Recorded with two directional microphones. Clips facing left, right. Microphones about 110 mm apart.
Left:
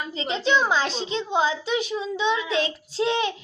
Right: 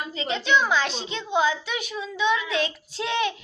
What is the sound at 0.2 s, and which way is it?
A child's voice, 30° left (ahead or behind).